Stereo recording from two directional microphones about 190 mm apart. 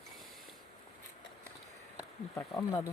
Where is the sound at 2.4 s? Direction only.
25° left (ahead or behind).